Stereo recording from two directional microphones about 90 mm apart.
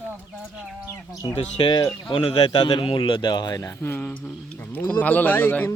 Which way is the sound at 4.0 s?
15° left (ahead or behind).